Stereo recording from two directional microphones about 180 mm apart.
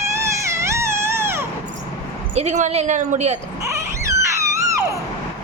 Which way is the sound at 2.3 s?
40° right (ahead or behind).